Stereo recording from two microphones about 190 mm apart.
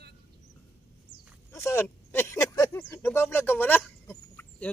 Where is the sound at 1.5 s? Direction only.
15° left (ahead or behind).